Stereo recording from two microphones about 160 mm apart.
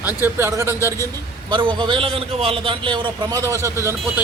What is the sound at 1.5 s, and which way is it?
A man's voice, 30° right (ahead or behind).